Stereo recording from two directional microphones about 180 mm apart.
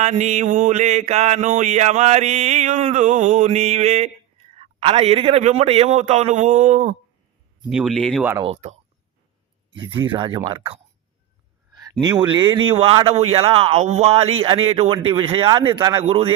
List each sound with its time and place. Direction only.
0.0 s mantra: 40° right (ahead or behind)
7.7 s speech: centre (ahead or behind)
8.2 s speech: 10° right (ahead or behind)
10.0 s a man's voice: 25° right (ahead or behind)
11.8 s a man's voice: 20° right (ahead or behind)
16.0 s mantra: 35° right (ahead or behind)